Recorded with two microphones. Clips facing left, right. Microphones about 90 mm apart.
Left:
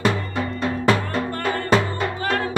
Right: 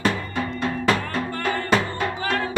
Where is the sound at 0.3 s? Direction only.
Centre (ahead or behind).